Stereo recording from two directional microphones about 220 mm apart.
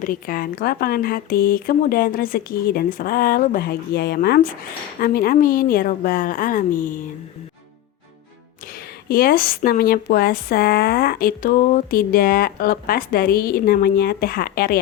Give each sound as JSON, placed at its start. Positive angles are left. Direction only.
{"t": 0.0, "sound": "a woman's voice", "side_deg": 40}
{"t": 8.7, "sound": "speech", "side_deg": 40}